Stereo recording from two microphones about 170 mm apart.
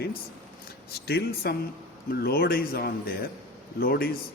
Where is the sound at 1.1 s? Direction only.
70° left (ahead or behind).